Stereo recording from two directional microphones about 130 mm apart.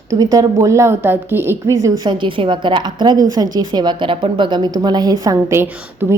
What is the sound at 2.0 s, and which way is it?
A woman's voice, 40° right (ahead or behind).